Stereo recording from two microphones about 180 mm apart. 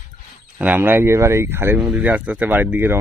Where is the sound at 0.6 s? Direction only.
10° right (ahead or behind).